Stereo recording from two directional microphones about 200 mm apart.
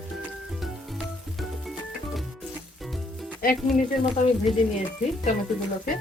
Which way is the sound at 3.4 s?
45° left (ahead or behind).